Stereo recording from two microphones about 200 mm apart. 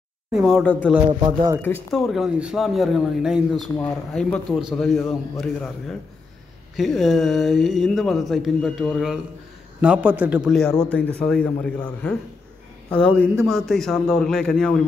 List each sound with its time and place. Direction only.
0.3 s speech: centre (ahead or behind)
1.2 s speech: 20° right (ahead or behind)
1.9 s speech: centre (ahead or behind)